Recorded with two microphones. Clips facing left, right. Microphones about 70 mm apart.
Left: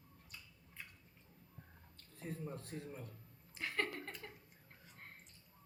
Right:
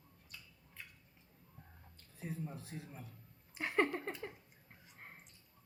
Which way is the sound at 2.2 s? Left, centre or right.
Centre.